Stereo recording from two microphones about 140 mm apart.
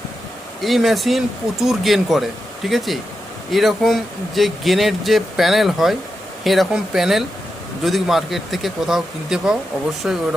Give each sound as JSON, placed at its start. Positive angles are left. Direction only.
{"t": 0.6, "sound": "speech", "side_deg": 0}